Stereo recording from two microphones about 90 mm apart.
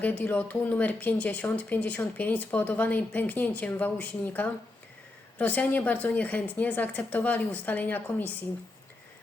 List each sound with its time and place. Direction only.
0.0 s a woman's voice: 20° left (ahead or behind)